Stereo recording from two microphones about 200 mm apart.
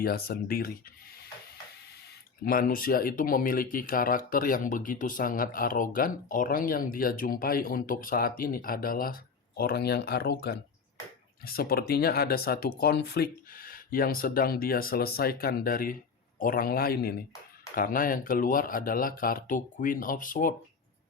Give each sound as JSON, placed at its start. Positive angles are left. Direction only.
{"t": 0.0, "sound": "speech", "side_deg": 50}
{"t": 2.4, "sound": "speech", "side_deg": 45}